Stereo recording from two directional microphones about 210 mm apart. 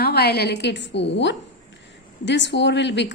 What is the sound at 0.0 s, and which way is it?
A woman's voice, 50° left (ahead or behind).